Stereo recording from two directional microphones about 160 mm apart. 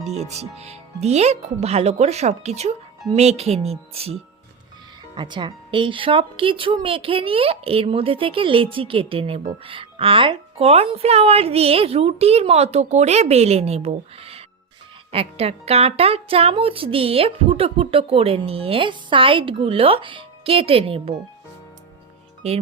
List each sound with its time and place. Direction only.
0.0 s speech: 40° right (ahead or behind)